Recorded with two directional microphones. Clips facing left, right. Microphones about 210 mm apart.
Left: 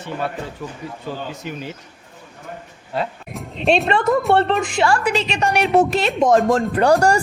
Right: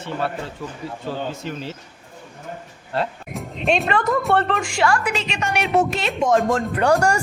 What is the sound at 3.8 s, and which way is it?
A woman's voice, 25° left (ahead or behind).